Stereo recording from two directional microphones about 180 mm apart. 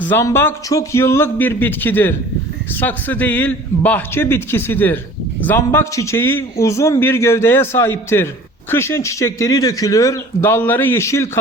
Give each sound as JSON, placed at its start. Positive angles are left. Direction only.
{"t": 0.0, "sound": "a man's voice", "side_deg": 15}